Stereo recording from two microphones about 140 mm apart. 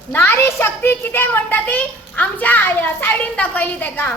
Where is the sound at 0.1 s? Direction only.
15° left (ahead or behind).